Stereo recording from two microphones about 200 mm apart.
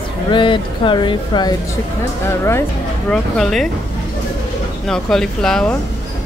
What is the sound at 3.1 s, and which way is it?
Speech, centre (ahead or behind).